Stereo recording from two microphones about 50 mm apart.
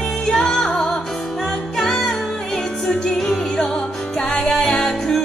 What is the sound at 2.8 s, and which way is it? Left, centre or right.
Music, centre.